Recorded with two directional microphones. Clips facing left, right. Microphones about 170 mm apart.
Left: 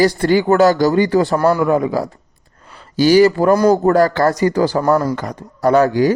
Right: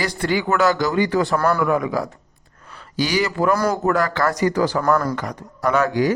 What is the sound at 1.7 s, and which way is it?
Speech, 30° left (ahead or behind).